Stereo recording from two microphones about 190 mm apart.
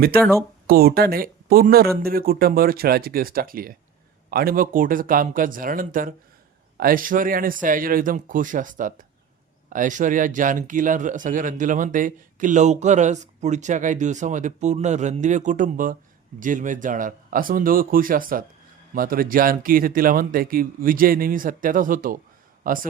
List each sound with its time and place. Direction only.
0.7 s a man's voice: 55° right (ahead or behind)